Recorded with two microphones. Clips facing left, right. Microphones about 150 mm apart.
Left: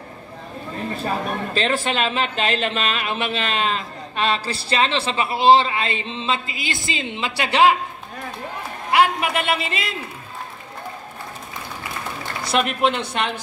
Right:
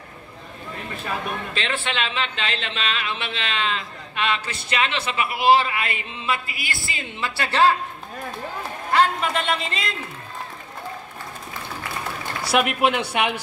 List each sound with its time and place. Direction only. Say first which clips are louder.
1.0 s a man's voice: left 3 dB; 40° left (ahead or behind); by 7.7 s 15° left (ahead or behind)
8.9 s a man's voice: left 2 dB; 10° left (ahead or behind)
12.4 s a woman's voice: even; 10° right (ahead or behind)